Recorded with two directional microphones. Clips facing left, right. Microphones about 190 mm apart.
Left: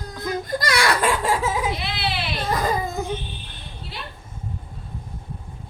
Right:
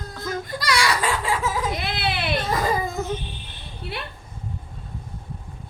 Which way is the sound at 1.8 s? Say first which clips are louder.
Right 1 dB; 50° right (ahead or behind).